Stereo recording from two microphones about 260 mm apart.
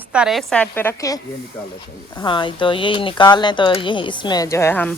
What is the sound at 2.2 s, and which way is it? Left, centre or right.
Speech, centre.